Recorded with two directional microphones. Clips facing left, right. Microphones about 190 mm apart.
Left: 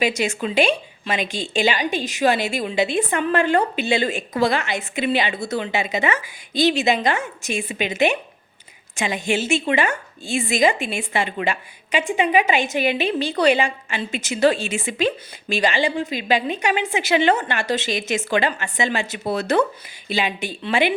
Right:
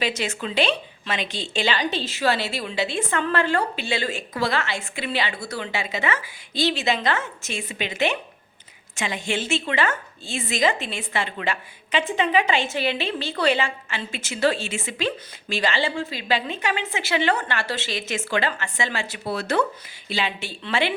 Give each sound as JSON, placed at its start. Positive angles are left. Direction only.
{"t": 0.0, "sound": "speech", "side_deg": 10}